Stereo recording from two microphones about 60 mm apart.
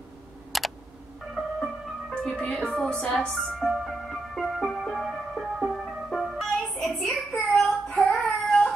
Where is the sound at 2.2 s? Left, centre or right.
Centre.